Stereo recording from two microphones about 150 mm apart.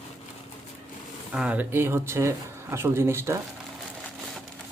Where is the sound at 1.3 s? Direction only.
10° right (ahead or behind).